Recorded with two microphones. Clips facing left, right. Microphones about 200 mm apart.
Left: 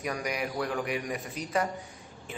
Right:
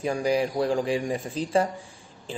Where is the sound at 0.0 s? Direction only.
30° right (ahead or behind).